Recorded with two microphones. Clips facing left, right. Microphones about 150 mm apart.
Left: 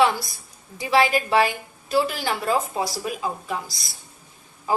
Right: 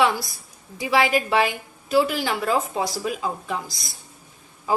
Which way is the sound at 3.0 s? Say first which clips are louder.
Right 1 dB; 20° left (ahead or behind).